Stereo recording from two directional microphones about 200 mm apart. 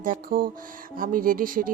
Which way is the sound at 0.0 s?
45° right (ahead or behind).